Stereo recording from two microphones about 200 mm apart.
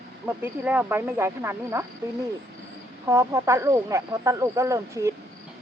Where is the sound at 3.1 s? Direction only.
15° right (ahead or behind).